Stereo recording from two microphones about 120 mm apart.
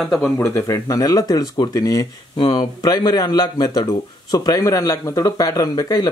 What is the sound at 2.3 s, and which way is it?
Speech, 45° left (ahead or behind).